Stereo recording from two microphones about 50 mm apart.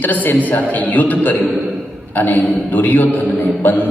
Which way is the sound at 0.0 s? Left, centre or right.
Left.